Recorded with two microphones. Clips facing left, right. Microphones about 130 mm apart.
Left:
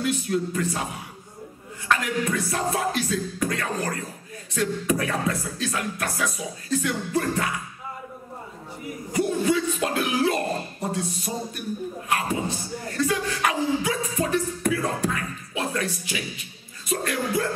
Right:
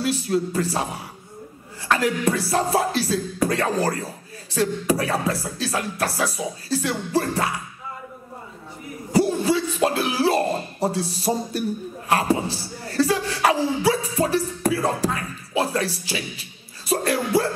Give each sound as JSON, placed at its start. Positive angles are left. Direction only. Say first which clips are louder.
{"t": 0.0, "sound": "speech", "louder": "right 2 dB", "side_deg": -35}
{"t": 2.0, "sound": "music", "louder": "right 4 dB", "side_deg": -30}
{"t": 9.1, "sound": "a sound", "louder": "right 3 dB", "side_deg": -30}
{"t": 12.1, "sound": "speech", "louder": "right 6 dB", "side_deg": -35}
{"t": 16.8, "sound": "music", "louder": "right 4 dB", "side_deg": -30}